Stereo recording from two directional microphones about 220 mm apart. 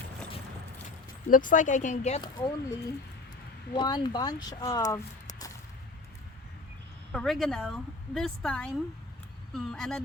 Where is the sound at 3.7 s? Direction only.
20° left (ahead or behind).